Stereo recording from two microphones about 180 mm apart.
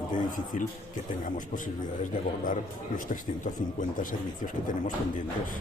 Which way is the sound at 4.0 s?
45° left (ahead or behind).